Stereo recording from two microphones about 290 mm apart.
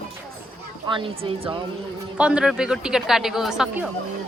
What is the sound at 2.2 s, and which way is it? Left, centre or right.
Speech, centre.